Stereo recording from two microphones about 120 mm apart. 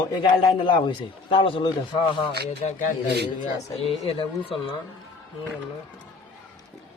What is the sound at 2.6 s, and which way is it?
Speech, 90° left.